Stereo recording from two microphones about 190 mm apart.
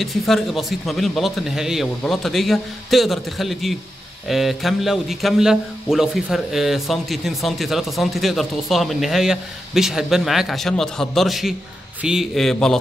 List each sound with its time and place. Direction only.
0.0 s a man's voice: centre (ahead or behind)